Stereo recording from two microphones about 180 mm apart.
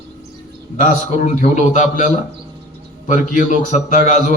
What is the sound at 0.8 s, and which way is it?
A man's voice, 40° left (ahead or behind).